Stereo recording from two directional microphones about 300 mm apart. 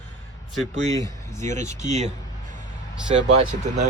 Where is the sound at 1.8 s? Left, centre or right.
Right.